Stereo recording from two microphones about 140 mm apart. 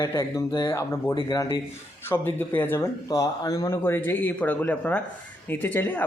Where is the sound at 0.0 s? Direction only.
20° left (ahead or behind).